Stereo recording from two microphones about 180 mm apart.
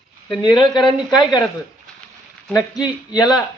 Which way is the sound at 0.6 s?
25° left (ahead or behind).